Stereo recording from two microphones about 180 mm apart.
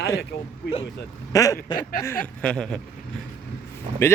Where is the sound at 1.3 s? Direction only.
20° left (ahead or behind).